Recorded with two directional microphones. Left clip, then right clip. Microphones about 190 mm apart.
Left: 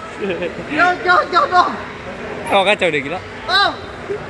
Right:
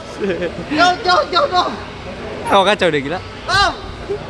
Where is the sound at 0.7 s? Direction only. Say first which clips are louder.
Even; 15° left (ahead or behind).